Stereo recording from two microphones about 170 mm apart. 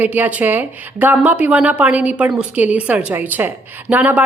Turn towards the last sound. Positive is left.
turn(degrees=-10)  # may be behind; listen again after turning